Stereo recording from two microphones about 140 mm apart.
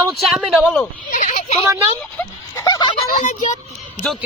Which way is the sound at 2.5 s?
25° left (ahead or behind).